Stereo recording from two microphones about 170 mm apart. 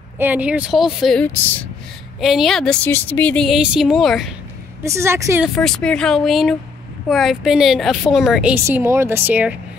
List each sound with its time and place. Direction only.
0.2 s speech: 10° right (ahead or behind)
1.3 s speech: 10° left (ahead or behind)
2.1 s speech: centre (ahead or behind)
4.8 s speech: 15° right (ahead or behind)
5.4 s speech: 5° left (ahead or behind)
8.6 s speech: 15° right (ahead or behind)